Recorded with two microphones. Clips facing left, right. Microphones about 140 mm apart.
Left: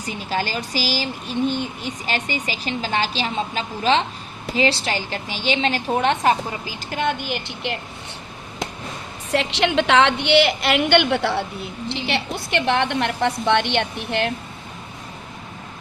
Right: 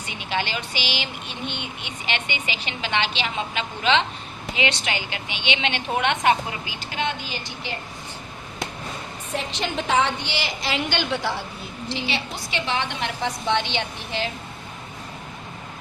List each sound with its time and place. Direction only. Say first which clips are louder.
0.0 s speech: left 3 dB; 40° left (ahead or behind); by 7.8 s 65° left (ahead or behind)
9.3 s a woman's voice: left 8 dB; 75° left (ahead or behind)